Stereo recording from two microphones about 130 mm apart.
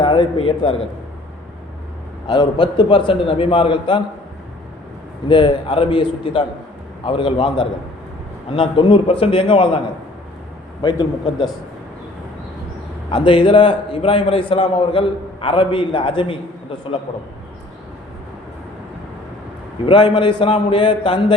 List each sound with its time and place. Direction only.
0.0 s a man's voice: 40° left (ahead or behind)
2.2 s a man's voice: 40° left (ahead or behind)
5.3 s a man's voice: 40° left (ahead or behind)
10.8 s a man's voice: 35° left (ahead or behind)
13.1 s a man's voice: 40° left (ahead or behind)
19.8 s a man's voice: 40° left (ahead or behind)